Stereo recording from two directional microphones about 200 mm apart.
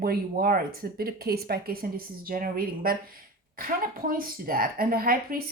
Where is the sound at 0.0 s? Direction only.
50° right (ahead or behind).